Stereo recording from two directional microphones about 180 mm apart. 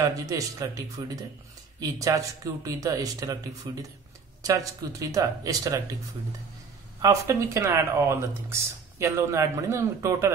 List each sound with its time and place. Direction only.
0.0 s speech: 20° right (ahead or behind)
7.0 s speech: 15° right (ahead or behind)